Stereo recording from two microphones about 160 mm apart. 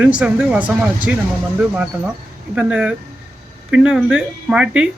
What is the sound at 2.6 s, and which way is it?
Speech, 5° right (ahead or behind).